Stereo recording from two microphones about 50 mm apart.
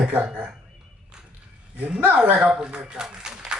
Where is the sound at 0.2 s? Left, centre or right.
Right.